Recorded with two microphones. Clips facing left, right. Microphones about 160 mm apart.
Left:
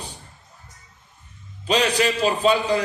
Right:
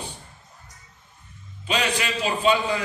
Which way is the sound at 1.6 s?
35° left (ahead or behind).